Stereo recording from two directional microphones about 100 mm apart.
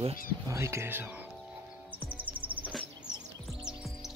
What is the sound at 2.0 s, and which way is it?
Music, 15° right (ahead or behind).